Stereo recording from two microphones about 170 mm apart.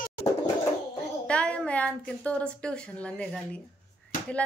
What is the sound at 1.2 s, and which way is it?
A woman's voice, 5° left (ahead or behind).